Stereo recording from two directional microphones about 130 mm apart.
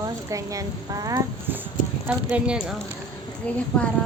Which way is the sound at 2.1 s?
10° right (ahead or behind).